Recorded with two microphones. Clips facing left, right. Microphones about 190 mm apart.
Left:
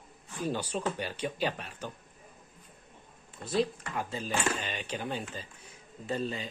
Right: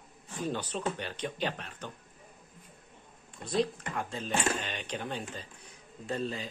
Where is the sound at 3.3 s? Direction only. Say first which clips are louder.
Left 1 dB; 5° left (ahead or behind).